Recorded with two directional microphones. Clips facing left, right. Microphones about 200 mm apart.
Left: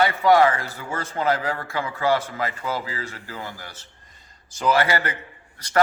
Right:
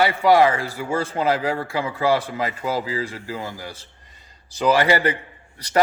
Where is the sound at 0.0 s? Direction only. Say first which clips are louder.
Right 1 dB; 10° right (ahead or behind).